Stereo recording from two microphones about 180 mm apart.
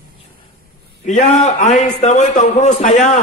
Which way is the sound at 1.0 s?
45° left (ahead or behind).